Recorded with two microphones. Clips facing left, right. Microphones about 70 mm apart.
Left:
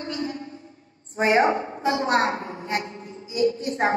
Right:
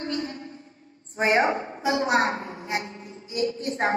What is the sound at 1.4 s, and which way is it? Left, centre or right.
A woman's voice, left.